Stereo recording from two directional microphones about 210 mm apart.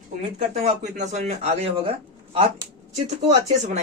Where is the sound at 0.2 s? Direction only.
30° right (ahead or behind).